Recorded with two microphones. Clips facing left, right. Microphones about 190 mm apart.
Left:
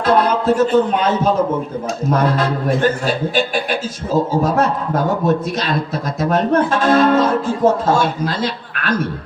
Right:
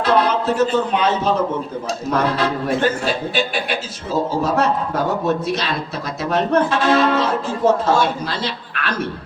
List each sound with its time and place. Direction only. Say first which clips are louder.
0.0 s speech: left 2 dB; 50° left (ahead or behind)
5.2 s speech: left 2 dB; 45° left (ahead or behind)